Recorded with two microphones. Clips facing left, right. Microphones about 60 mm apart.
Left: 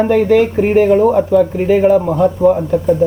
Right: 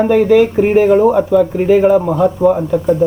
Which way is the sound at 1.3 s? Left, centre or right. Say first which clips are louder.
Even; centre.